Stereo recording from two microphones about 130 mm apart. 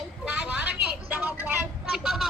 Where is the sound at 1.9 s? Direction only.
5° right (ahead or behind).